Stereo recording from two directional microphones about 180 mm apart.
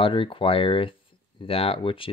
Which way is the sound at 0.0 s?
30° left (ahead or behind).